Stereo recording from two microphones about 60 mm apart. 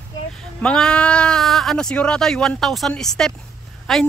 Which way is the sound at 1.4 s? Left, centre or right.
Centre.